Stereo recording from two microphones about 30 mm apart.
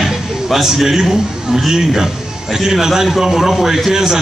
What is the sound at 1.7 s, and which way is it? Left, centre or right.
A man's voice, centre.